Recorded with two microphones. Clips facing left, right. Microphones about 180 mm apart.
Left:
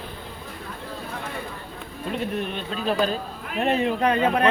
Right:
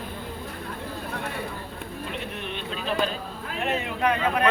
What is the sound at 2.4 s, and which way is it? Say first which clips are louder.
A man's voice: left 4 dB; 40° left (ahead or behind).